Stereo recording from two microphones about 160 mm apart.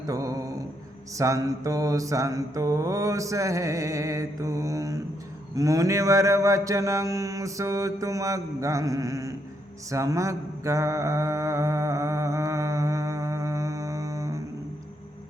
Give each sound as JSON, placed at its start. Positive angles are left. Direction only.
{"t": 0.0, "sound": "mantra", "side_deg": -20}